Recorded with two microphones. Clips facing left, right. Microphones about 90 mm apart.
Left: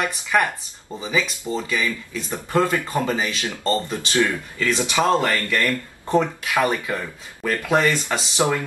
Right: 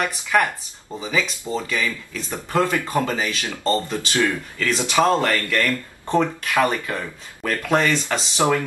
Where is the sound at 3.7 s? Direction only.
20° left (ahead or behind).